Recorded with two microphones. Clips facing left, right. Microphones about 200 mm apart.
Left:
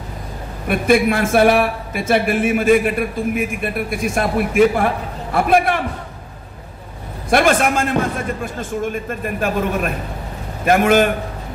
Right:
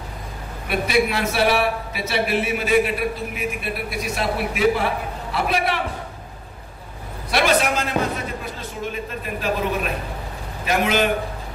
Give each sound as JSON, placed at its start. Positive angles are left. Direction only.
{"t": 0.7, "sound": "speech", "side_deg": 50}
{"t": 7.2, "sound": "speech", "side_deg": 50}